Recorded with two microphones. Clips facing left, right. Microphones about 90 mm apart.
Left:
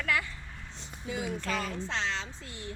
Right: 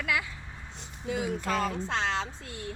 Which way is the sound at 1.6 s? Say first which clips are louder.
Right 4 dB; 50° right (ahead or behind).